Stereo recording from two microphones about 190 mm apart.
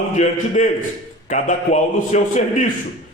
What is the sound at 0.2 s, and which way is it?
A man's voice, 40° left (ahead or behind).